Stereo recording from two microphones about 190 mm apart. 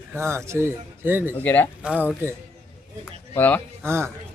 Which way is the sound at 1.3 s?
10° left (ahead or behind).